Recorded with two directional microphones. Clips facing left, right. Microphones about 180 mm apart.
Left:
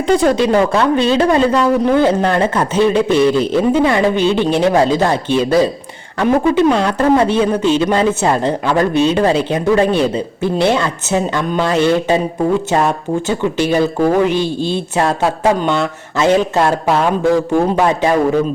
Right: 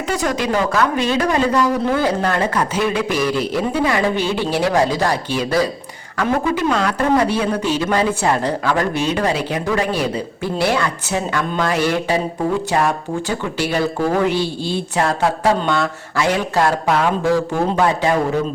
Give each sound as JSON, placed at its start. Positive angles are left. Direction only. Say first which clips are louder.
{"t": 0.1, "sound": "speech", "louder": "left 8 dB", "side_deg": 30}